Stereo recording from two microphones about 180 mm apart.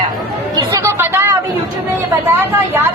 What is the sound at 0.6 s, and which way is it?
Speech, 20° right (ahead or behind).